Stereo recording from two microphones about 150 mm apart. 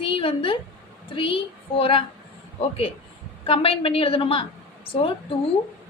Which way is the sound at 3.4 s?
35° left (ahead or behind).